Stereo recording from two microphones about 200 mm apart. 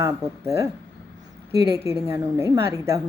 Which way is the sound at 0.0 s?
15° right (ahead or behind).